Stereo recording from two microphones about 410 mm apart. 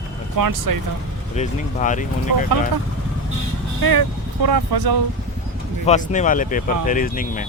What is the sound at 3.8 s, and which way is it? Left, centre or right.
Speech, right.